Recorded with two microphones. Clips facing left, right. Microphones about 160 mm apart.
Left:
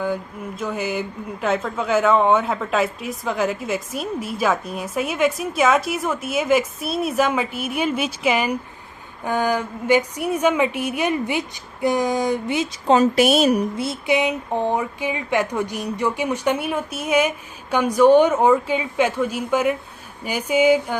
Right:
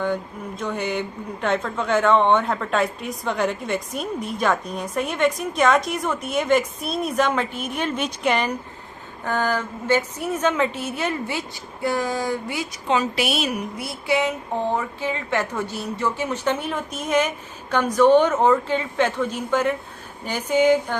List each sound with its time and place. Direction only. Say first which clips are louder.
0.0 s speech: even; 5° left (ahead or behind)
12.9 s a woman's voice: left 7 dB; 45° left (ahead or behind)
13.7 s speech: left 2 dB; 20° left (ahead or behind)